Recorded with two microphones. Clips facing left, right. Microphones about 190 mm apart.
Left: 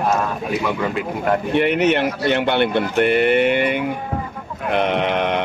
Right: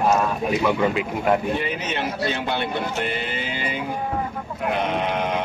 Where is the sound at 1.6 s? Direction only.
65° left (ahead or behind).